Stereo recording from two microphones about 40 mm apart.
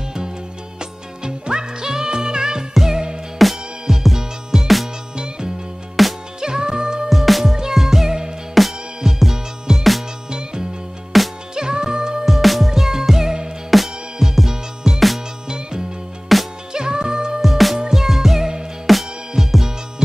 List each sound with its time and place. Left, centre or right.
0.7 s music: right
6.0 s music: centre
6.4 s music: centre
7.1 s music: centre
9.0 s music: centre
11.1 s music: centre
11.5 s music: centre
12.3 s music: centre
15.4 s music: centre
16.3 s music: centre
16.7 s music: centre
17.4 s music: centre
17.7 s music: centre